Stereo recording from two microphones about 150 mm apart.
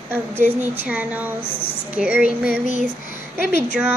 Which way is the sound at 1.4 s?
40° left (ahead or behind).